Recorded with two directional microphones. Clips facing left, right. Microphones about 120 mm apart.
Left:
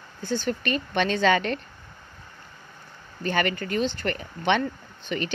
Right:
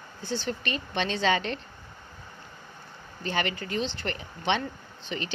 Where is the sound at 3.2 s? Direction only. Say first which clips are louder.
Left 4 dB; 55° left (ahead or behind).